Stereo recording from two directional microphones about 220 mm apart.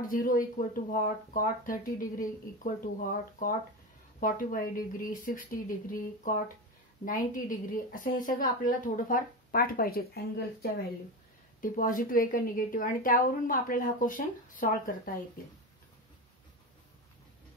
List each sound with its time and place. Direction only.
0.0 s a woman's voice: 40° left (ahead or behind)